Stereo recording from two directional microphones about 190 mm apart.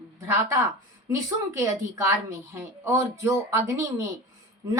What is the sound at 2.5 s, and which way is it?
Speech, 15° right (ahead or behind).